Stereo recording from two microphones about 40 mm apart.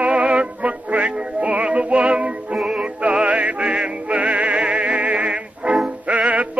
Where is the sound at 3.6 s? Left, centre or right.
Right.